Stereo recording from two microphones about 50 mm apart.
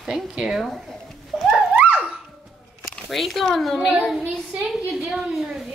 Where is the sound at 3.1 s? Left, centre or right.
Centre.